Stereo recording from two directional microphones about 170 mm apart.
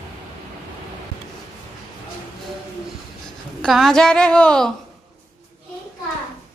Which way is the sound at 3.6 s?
Centre (ahead or behind).